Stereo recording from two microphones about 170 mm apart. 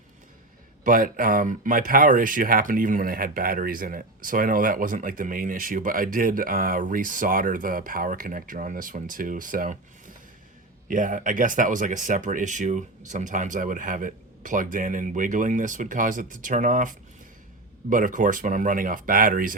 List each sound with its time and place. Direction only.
0.9 s speech: 55° right (ahead or behind)
10.8 s speech: 50° right (ahead or behind)